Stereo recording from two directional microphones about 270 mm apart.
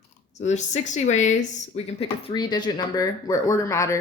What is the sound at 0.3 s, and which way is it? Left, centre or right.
A woman's voice, left.